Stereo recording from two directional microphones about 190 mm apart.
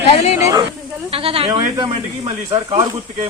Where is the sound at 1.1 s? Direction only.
30° right (ahead or behind).